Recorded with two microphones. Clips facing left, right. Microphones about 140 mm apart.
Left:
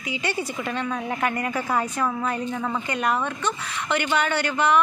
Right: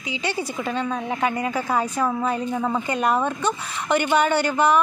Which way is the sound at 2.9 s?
30° right (ahead or behind).